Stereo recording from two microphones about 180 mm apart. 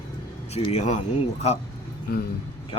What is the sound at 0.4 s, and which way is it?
Speech, 35° left (ahead or behind).